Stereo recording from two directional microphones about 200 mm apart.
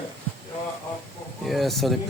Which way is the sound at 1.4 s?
Centre (ahead or behind).